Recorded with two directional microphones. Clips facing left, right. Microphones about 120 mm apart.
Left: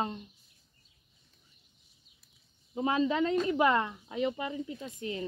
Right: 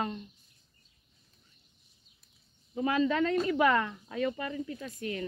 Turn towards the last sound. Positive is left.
turn(degrees=25)  # may be behind; listen again after turning